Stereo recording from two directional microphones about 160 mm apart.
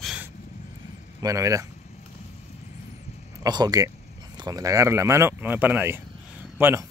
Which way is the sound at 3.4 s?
25° right (ahead or behind).